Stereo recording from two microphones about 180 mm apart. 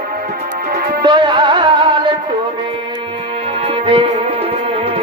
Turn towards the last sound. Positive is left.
turn(degrees=-30)  # may be behind; listen again after turning